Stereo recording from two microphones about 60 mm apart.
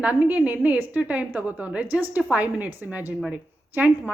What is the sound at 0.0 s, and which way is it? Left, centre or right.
Speech, right.